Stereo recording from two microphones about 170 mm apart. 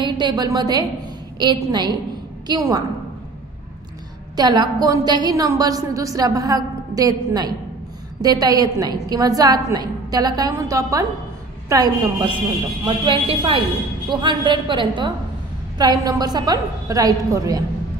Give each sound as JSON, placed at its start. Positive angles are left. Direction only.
{"t": 0.0, "sound": "a woman's voice", "side_deg": -25}
{"t": 4.4, "sound": "a woman's voice", "side_deg": -25}